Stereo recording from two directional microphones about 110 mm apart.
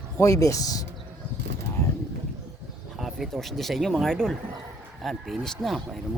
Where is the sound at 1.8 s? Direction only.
25° left (ahead or behind).